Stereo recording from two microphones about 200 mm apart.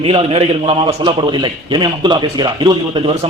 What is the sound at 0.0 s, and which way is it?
Speech, 30° right (ahead or behind).